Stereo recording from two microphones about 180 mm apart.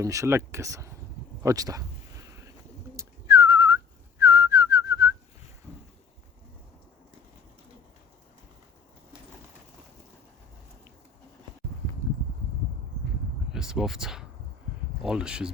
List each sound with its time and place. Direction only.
0.0 s speech: 15° right (ahead or behind)
2.9 s whistling: 15° right (ahead or behind)
13.5 s a sound: 5° right (ahead or behind)
15.0 s speech: 5° right (ahead or behind)